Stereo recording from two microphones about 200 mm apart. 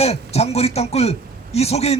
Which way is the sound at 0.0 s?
30° left (ahead or behind).